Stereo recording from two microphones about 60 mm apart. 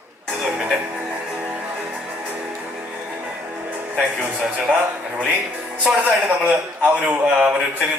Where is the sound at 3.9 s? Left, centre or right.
Right.